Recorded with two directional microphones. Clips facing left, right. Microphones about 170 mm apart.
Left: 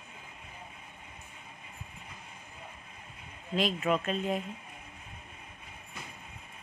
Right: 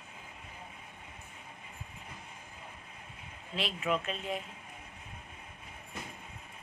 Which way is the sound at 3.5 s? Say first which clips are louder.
Left 4 dB; 45° left (ahead or behind).